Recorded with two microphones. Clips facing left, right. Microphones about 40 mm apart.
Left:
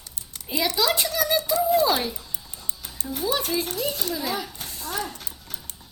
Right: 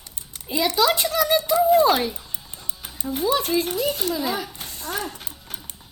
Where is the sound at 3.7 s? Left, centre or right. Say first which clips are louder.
Right 4 dB; centre.